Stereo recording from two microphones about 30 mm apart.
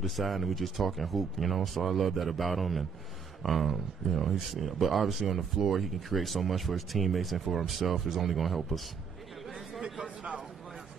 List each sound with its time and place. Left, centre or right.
0.0 s speech: centre